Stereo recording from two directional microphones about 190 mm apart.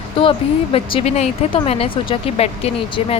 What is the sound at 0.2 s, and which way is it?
Speech, 30° left (ahead or behind).